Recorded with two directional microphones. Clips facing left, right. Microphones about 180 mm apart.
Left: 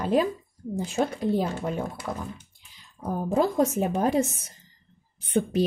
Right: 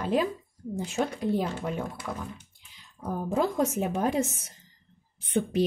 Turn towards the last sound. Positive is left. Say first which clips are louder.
# left 2 dB
turn(degrees=40)  # may be behind; listen again after turning